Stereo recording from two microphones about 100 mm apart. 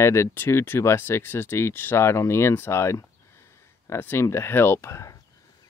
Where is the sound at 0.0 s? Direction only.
25° left (ahead or behind).